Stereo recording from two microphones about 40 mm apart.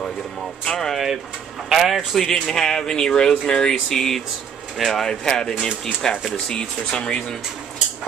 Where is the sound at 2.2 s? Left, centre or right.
Centre.